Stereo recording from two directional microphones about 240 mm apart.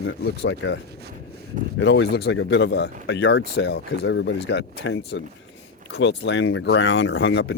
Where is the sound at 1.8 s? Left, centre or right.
Left.